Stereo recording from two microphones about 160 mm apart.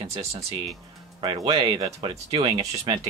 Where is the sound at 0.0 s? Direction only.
40° right (ahead or behind).